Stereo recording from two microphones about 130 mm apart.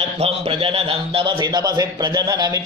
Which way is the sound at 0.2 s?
45° right (ahead or behind).